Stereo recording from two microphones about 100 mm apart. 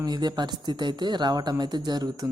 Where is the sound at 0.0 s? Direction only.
45° right (ahead or behind).